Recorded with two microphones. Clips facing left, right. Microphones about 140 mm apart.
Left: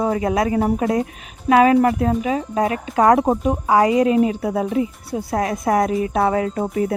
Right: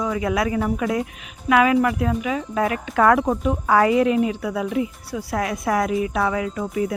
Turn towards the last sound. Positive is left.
turn(degrees=35)  # may be behind; listen again after turning